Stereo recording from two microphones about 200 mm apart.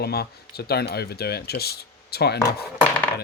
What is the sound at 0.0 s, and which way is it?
Speech, 50° left (ahead or behind).